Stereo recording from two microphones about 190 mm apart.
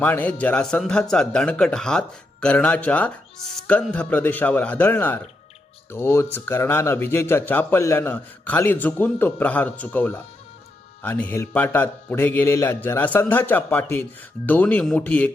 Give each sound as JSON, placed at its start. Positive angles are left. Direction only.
{"t": 0.0, "sound": "a man's voice", "side_deg": 10}